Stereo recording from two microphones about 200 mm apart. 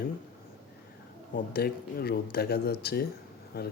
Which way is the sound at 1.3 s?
50° left (ahead or behind).